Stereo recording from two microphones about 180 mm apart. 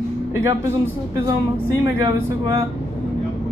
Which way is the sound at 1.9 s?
15° right (ahead or behind).